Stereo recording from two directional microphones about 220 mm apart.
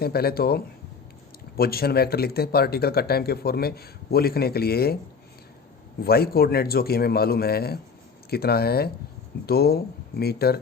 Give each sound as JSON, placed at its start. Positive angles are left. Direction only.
{"t": 0.0, "sound": "speech", "side_deg": 45}
{"t": 6.1, "sound": "speech", "side_deg": 45}